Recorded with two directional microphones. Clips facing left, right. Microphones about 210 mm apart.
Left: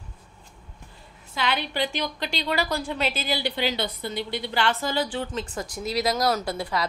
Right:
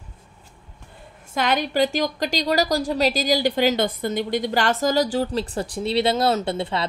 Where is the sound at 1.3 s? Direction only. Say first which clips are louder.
Right 6 dB; 45° right (ahead or behind).